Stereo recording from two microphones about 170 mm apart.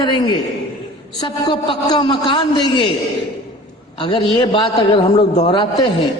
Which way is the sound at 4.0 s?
30° left (ahead or behind).